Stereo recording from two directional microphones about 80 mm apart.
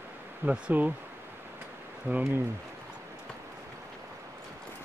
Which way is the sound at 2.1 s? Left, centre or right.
Right.